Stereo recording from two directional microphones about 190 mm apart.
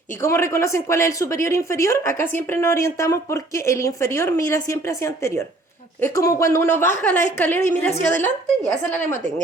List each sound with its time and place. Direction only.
0.2 s speech: 15° left (ahead or behind)